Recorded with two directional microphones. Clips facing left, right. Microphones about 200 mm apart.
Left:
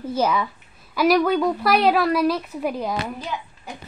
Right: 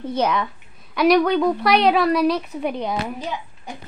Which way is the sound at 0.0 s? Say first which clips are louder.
Even; 5° left (ahead or behind).